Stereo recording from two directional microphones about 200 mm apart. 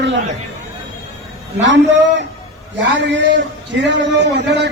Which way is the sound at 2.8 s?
60° right (ahead or behind).